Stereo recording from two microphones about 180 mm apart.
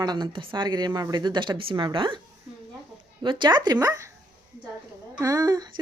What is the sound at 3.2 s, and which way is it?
Speech, 25° right (ahead or behind).